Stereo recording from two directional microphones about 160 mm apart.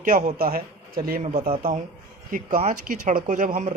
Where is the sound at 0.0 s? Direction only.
55° right (ahead or behind).